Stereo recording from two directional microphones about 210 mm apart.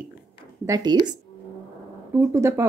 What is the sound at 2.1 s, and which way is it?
Speech, 15° right (ahead or behind).